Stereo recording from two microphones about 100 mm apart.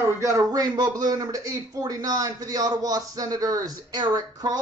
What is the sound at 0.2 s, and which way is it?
A man's voice, 35° right (ahead or behind).